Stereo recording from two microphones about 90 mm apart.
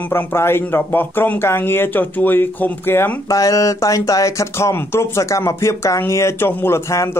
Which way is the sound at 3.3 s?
40° left (ahead or behind).